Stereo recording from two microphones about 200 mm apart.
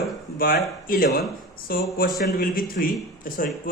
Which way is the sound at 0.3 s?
45° left (ahead or behind).